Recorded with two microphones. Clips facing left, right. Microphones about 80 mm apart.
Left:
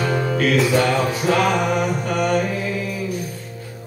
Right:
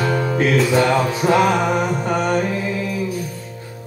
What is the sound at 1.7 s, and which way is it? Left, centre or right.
Mantra, right.